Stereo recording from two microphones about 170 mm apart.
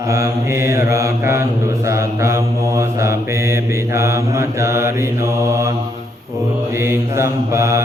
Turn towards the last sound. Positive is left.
turn(degrees=-15)  # may be behind; listen again after turning